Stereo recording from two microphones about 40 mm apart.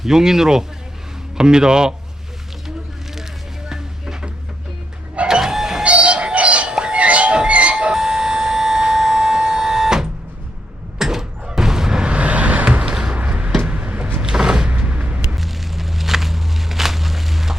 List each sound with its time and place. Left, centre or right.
0.0 s speech: centre
3.7 s music: centre
5.3 s printer: centre
5.8 s music: right
6.7 s music: right
7.0 s music: right
7.9 s siren: centre
10.9 s door: centre; by 12.9 s right
12.9 s a sound: right
13.7 s vehicle: right
14.2 s cupboard open or close: centre
14.7 s vehicle: right
15.4 s walk: centre